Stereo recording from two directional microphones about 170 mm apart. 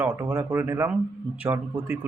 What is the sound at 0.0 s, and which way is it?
Speech, 10° right (ahead or behind).